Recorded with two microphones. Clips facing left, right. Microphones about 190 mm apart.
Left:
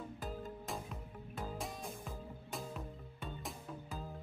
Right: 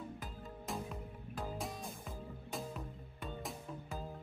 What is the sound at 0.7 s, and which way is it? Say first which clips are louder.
Music: right 2 dB; centre (ahead or behind).